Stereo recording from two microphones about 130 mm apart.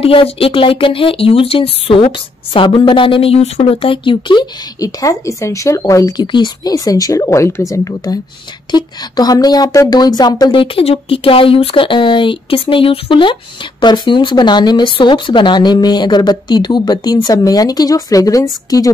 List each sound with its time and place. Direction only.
0.0 s speech: 45° left (ahead or behind)
10.5 s speech: 45° left (ahead or behind); by 18.9 s 25° left (ahead or behind)